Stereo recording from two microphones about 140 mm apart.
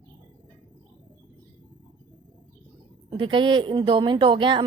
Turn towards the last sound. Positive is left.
turn(degrees=-35)  # may be behind; listen again after turning